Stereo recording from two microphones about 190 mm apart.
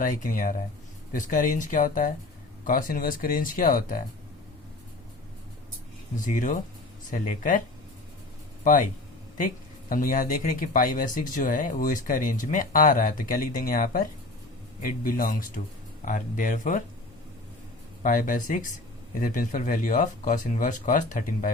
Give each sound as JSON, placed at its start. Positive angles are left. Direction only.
{"t": 0.0, "sound": "speech", "side_deg": 45}
{"t": 6.1, "sound": "speech", "side_deg": 45}
{"t": 8.6, "sound": "speech", "side_deg": 45}
{"t": 9.9, "sound": "speech", "side_deg": 45}
{"t": 18.0, "sound": "speech", "side_deg": 45}